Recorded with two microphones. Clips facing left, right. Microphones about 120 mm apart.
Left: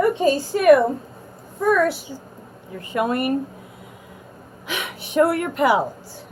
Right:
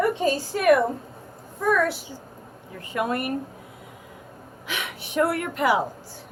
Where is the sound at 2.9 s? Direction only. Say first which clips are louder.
Left 5 dB; 20° left (ahead or behind).